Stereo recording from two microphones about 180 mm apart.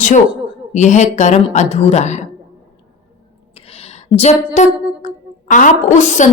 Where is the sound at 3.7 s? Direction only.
35° left (ahead or behind).